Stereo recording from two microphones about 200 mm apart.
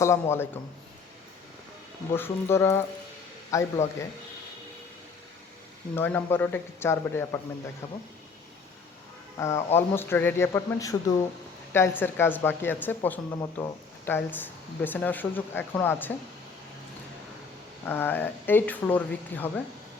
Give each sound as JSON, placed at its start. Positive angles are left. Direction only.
{"t": 0.0, "sound": "speech", "side_deg": 15}
{"t": 2.1, "sound": "speech", "side_deg": 10}
{"t": 6.0, "sound": "speech", "side_deg": 10}
{"t": 9.4, "sound": "speech", "side_deg": 15}
{"t": 17.8, "sound": "speech", "side_deg": 10}